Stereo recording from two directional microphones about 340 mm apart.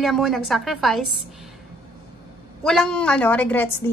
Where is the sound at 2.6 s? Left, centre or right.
Centre.